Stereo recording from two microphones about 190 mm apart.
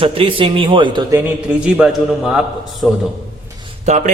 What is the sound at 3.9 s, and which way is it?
Speech, 40° right (ahead or behind).